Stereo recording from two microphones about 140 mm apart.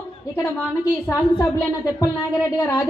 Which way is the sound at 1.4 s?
20° left (ahead or behind).